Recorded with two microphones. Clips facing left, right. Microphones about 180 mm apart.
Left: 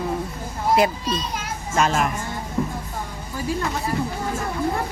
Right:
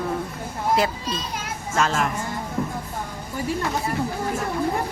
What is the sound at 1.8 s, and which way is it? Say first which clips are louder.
Speech: left 2 dB; 15° left (ahead or behind).